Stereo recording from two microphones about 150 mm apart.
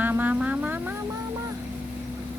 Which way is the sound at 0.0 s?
10° right (ahead or behind).